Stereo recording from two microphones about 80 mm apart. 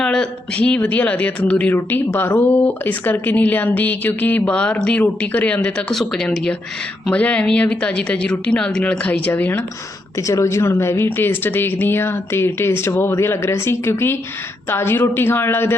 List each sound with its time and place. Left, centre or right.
0.0 s speech: centre
1.7 s speech: left
5.9 s speech: centre; by 9.6 s left
10.2 s a woman's voice: left